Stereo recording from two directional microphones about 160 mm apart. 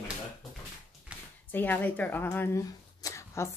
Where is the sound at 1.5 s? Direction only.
10° left (ahead or behind).